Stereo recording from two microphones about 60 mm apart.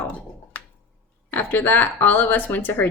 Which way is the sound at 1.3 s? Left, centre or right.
Left.